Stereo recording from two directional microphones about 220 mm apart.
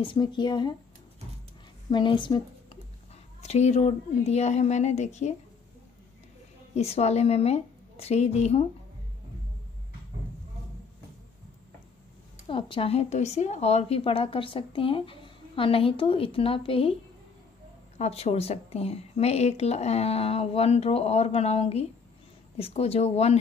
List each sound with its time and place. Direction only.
0.0 s speech: 20° left (ahead or behind)
1.9 s speech: 20° left (ahead or behind)
6.7 s speech: 30° left (ahead or behind)
12.4 s speech: 25° left (ahead or behind)
17.9 s speech: 30° left (ahead or behind)